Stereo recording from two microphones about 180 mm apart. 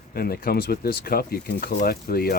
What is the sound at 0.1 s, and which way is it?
Speech, 55° left (ahead or behind).